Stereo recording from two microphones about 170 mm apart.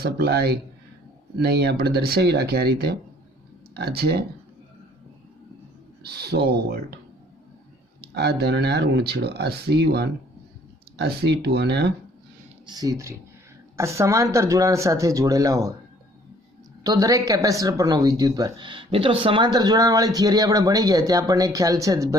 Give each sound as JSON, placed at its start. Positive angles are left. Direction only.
{"t": 0.0, "sound": "speech", "side_deg": -70}
{"t": 6.0, "sound": "speech", "side_deg": -70}
{"t": 8.1, "sound": "speech", "side_deg": -75}
{"t": 12.6, "sound": "speech", "side_deg": -20}
{"t": 16.8, "sound": "speech", "side_deg": -20}